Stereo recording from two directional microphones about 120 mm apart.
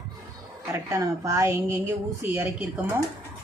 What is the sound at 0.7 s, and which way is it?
A woman's voice, 25° right (ahead or behind).